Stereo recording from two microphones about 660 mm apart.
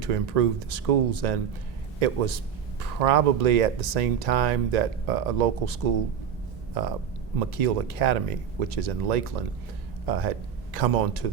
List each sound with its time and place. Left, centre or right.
0.0 s a man's voice: right